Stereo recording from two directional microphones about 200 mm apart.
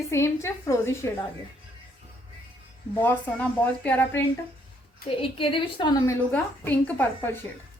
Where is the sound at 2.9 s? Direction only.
10° left (ahead or behind).